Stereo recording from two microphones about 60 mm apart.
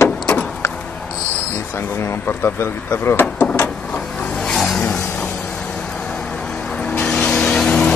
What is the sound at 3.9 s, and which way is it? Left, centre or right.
Vehicle, centre.